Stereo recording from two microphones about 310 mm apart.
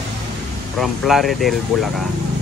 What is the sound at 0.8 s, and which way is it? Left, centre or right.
Speech, centre.